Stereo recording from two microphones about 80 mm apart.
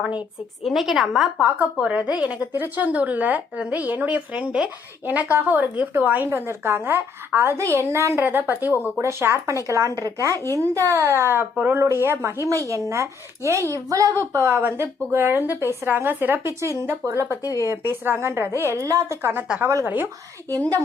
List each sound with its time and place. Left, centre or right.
0.6 s a woman's voice: centre
1.4 s a woman's voice: centre; by 8.2 s right
8.2 s a woman's voice: right
10.3 s speech: left
10.6 s a woman's voice: right
11.5 s speech: right
11.8 s a woman's voice: right
19.2 s speech: right